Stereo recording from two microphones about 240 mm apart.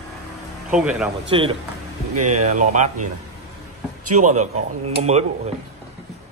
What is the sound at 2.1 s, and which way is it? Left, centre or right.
Speech, right.